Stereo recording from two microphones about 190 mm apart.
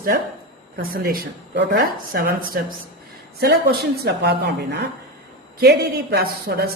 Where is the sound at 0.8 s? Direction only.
50° right (ahead or behind).